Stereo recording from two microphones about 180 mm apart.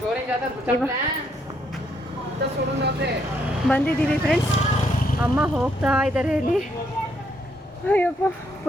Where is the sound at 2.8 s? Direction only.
65° right (ahead or behind).